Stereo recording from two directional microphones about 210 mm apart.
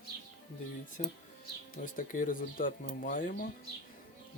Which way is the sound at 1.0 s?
35° left (ahead or behind).